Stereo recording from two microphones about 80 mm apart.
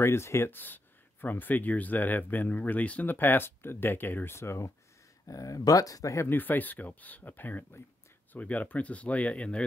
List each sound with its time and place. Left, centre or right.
0.0 s speech: left
6.2 s speech: left